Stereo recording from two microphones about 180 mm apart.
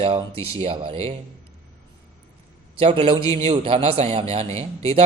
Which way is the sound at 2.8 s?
30° right (ahead or behind).